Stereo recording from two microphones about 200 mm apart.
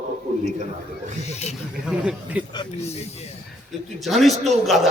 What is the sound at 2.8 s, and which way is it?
Speech, 35° left (ahead or behind).